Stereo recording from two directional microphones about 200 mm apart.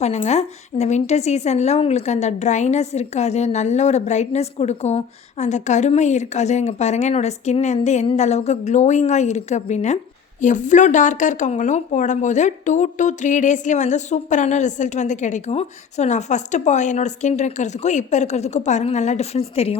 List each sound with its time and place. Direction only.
0.0 s speech: 35° left (ahead or behind)